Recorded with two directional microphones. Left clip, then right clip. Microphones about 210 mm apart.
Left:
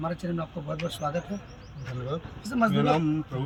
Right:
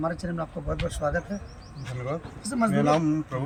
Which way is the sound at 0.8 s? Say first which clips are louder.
Right 1 dB; 10° left (ahead or behind).